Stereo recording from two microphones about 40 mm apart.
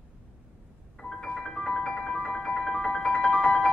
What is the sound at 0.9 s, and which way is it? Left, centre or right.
Music, centre.